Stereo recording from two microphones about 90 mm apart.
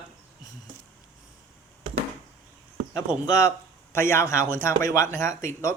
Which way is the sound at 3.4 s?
30° left (ahead or behind).